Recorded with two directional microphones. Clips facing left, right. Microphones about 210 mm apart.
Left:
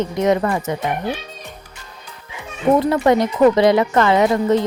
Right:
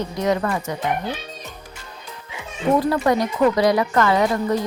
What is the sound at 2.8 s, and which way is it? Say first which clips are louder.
Speech: left 3 dB; 25° left (ahead or behind).